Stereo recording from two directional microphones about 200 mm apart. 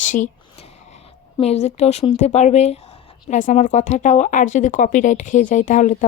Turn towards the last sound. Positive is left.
turn(degrees=40)  # may be behind; listen again after turning